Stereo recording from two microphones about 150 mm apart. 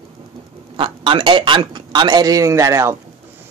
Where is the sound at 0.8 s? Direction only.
35° right (ahead or behind).